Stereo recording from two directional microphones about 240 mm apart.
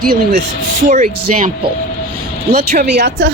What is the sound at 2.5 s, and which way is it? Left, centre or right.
Speech, right.